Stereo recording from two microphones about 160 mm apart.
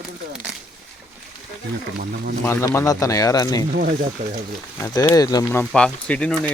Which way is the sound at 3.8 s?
50° right (ahead or behind).